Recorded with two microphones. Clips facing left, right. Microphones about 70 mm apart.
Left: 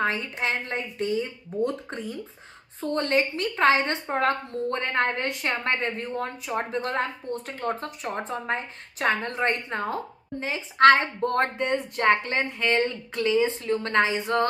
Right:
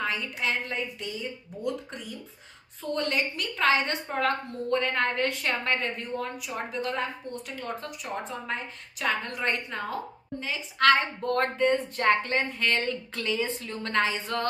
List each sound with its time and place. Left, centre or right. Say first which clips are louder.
0.0 s a woman's voice: left 4 dB; left